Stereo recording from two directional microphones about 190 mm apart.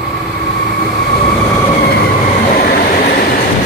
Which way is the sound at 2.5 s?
50° left (ahead or behind).